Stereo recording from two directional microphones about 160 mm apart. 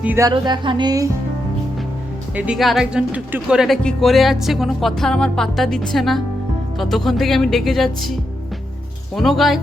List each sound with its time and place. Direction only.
0.0 s music: 10° right (ahead or behind)
0.3 s speech: 25° right (ahead or behind)
2.3 s speech: 5° right (ahead or behind)